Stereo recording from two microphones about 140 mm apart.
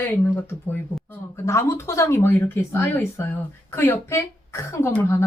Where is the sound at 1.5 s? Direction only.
20° left (ahead or behind).